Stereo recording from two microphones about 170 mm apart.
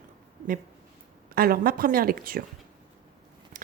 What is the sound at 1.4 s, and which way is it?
A woman's voice, 60° right (ahead or behind).